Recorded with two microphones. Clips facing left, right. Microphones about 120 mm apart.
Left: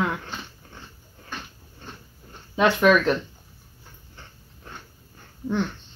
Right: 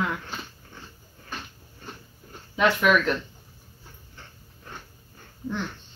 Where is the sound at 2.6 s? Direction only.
25° left (ahead or behind).